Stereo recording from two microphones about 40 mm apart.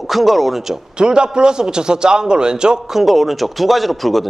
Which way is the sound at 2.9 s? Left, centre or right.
Centre.